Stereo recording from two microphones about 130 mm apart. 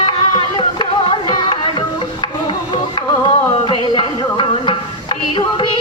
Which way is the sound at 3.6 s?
40° left (ahead or behind).